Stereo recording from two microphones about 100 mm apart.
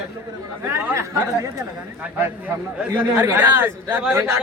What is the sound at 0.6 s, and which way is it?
Speech, 25° right (ahead or behind).